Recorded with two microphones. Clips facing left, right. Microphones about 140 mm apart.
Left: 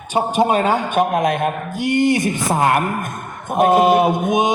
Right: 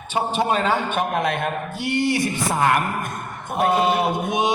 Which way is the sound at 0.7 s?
45° left (ahead or behind).